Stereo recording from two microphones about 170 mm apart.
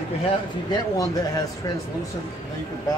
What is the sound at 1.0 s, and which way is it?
Speech, 25° left (ahead or behind).